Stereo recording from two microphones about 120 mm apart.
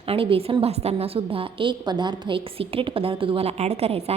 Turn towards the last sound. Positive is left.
turn(degrees=-60)  # may be behind; listen again after turning